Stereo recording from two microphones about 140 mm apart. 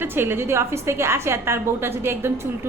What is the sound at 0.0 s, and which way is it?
A woman's voice, 15° right (ahead or behind).